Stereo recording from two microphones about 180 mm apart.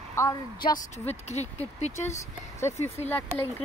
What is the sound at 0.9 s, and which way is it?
Speech, 40° left (ahead or behind).